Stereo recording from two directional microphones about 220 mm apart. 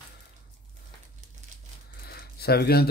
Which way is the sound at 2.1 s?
45° left (ahead or behind).